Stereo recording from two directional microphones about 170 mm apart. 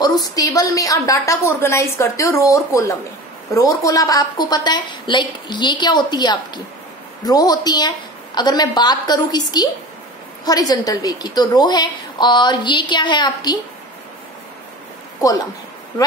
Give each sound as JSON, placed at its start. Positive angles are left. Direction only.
{"t": 0.2, "sound": "a woman's voice", "side_deg": 20}